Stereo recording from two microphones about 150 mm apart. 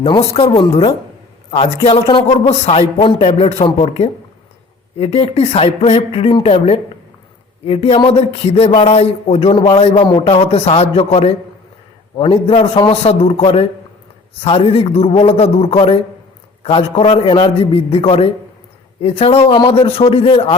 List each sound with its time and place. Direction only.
0.0 s a man's voice: 35° left (ahead or behind)